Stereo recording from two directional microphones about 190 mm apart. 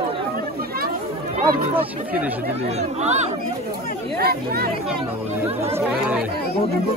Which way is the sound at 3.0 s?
35° right (ahead or behind).